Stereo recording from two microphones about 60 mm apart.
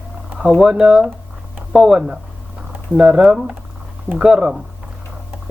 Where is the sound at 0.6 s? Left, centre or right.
Centre.